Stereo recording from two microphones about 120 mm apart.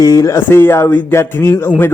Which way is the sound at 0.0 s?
25° left (ahead or behind).